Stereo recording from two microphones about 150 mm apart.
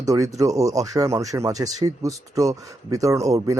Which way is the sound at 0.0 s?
20° right (ahead or behind).